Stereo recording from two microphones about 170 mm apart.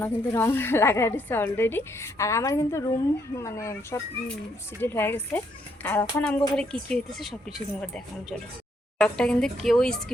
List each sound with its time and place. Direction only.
0.0 s a woman's voice: 15° left (ahead or behind)